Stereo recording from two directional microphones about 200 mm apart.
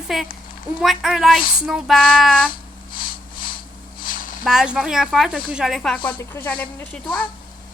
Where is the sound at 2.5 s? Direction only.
45° left (ahead or behind).